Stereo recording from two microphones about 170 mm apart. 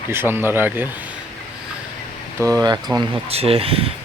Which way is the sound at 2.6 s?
20° right (ahead or behind).